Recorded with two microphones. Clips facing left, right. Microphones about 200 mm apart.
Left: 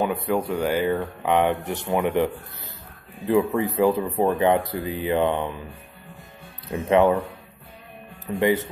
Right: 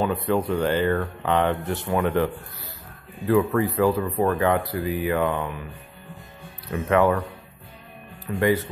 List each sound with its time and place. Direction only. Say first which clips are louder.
0.0 s speech: even; 10° left (ahead or behind)
3.3 s speech: even; 20° left (ahead or behind)
6.7 s speech: left 2 dB; 20° left (ahead or behind)
8.3 s speech: left 1 dB; 25° left (ahead or behind)